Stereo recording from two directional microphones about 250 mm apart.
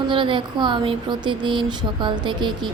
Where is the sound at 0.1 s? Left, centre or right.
Centre.